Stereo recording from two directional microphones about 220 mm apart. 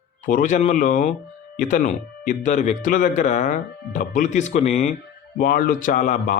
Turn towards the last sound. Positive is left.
turn(degrees=35)  # may be behind; listen again after turning